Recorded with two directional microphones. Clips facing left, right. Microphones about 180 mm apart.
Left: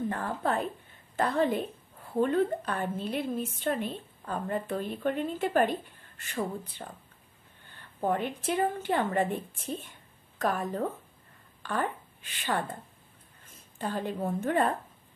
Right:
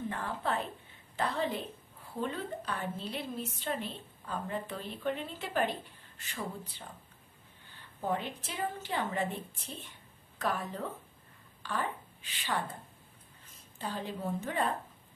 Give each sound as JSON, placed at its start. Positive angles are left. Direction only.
{"t": 0.1, "sound": "a woman's voice", "side_deg": 50}
{"t": 8.0, "sound": "a woman's voice", "side_deg": 55}